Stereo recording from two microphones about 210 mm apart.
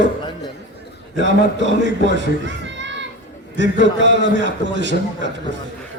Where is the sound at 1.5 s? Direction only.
60° right (ahead or behind).